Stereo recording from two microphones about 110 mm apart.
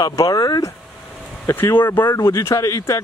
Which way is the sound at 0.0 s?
30° left (ahead or behind).